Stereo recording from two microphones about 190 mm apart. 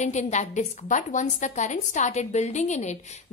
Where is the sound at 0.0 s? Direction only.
40° left (ahead or behind).